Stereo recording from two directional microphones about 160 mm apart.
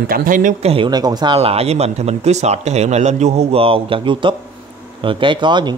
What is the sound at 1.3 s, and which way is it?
Speech, 40° right (ahead or behind).